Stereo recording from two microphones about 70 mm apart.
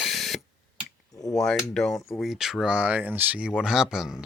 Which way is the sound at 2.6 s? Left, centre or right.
Centre.